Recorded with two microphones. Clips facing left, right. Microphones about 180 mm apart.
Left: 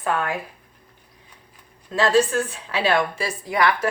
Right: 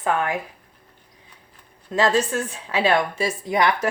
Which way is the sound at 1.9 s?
20° right (ahead or behind).